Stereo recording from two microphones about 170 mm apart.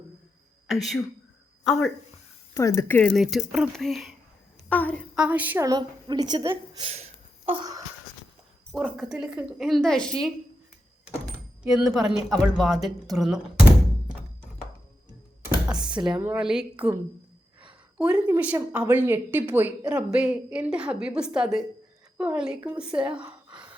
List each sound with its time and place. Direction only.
0.7 s a woman's voice: centre (ahead or behind)
2.6 s speech: 15° left (ahead or behind)
3.1 s a woman's voice: centre (ahead or behind)
5.1 s a woman's voice: 10° right (ahead or behind); by 6.5 s 25° right (ahead or behind)
6.7 s a sound: 35° right (ahead or behind)
8.7 s a woman's voice: 5° right (ahead or behind)
11.6 s a woman's voice: centre (ahead or behind)
15.7 s speech: 25° right (ahead or behind)
16.2 s a woman's voice: 5° right (ahead or behind)